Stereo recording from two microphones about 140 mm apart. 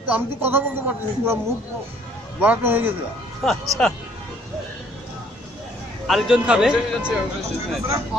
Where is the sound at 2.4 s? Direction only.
15° right (ahead or behind).